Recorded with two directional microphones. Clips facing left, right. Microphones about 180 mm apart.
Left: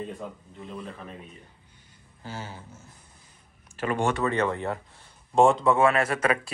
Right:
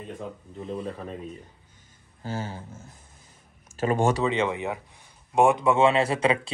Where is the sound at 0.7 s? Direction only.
35° right (ahead or behind).